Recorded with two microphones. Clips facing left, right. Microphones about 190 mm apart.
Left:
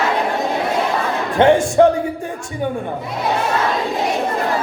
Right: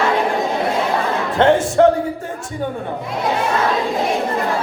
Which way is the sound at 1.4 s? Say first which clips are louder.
Left 1 dB; 15° left (ahead or behind).